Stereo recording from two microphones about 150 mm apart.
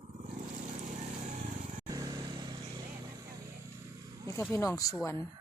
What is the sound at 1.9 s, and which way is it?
Vehicle, 25° right (ahead or behind).